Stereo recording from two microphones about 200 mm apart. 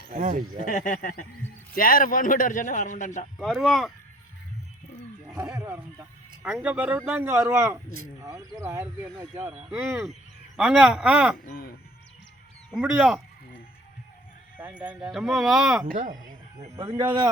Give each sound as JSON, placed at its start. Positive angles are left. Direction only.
{"t": 0.1, "sound": "speech", "side_deg": -40}
{"t": 0.6, "sound": "a man's voice", "side_deg": 40}
{"t": 3.3, "sound": "speech", "side_deg": 0}
{"t": 5.3, "sound": "speech", "side_deg": -10}
{"t": 11.4, "sound": "speech", "side_deg": 45}
{"t": 12.7, "sound": "speech", "side_deg": -5}
{"t": 14.6, "sound": "speech", "side_deg": -10}
{"t": 15.9, "sound": "speech", "side_deg": -40}
{"t": 16.7, "sound": "speech", "side_deg": -20}